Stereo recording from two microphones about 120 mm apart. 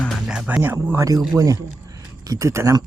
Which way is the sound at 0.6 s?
15° right (ahead or behind).